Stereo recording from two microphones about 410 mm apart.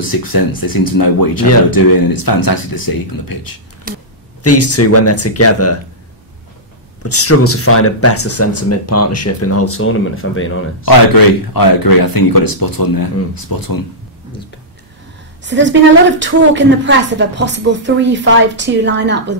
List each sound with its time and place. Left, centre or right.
0.0 s speech: left
3.9 s a woman's voice: centre
4.4 s speech: left
7.0 s speech: left
10.9 s speech: left
15.4 s a woman's voice: right